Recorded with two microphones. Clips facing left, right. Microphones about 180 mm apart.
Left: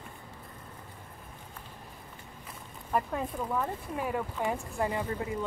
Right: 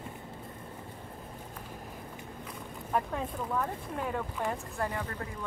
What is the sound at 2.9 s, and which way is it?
Speech, 5° left (ahead or behind).